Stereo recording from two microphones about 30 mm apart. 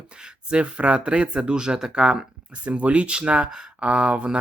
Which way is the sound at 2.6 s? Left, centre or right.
Right.